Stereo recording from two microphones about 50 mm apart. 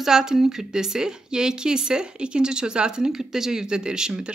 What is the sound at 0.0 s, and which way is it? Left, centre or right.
A woman's voice, centre.